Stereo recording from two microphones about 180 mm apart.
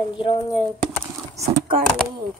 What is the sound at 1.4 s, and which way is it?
Speech, 50° right (ahead or behind).